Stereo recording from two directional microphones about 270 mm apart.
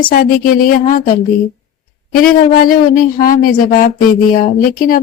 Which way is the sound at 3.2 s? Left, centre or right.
Left.